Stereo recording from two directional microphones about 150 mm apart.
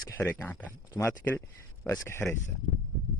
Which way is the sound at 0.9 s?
20° left (ahead or behind).